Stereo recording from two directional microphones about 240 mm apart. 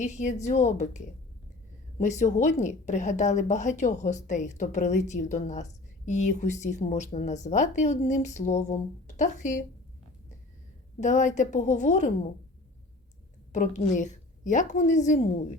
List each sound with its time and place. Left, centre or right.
0.0 s a woman's voice: left
11.0 s a woman's voice: left
13.5 s a woman's voice: left